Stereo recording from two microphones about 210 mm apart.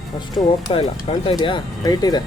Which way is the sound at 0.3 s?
25° left (ahead or behind).